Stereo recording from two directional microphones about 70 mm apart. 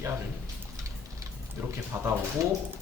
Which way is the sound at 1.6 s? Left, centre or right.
Right.